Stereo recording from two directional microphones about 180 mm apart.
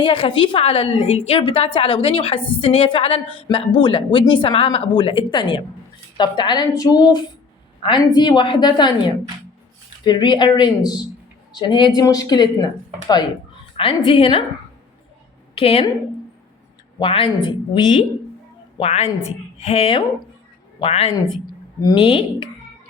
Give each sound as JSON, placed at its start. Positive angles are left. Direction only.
{"t": 0.0, "sound": "a woman's voice", "side_deg": 30}
{"t": 10.0, "sound": "a woman's voice", "side_deg": 25}
{"t": 13.7, "sound": "a woman's voice", "side_deg": 30}
{"t": 15.5, "sound": "a woman's voice", "side_deg": 30}
{"t": 17.0, "sound": "a woman's voice", "side_deg": 30}
{"t": 21.4, "sound": "speech", "side_deg": 20}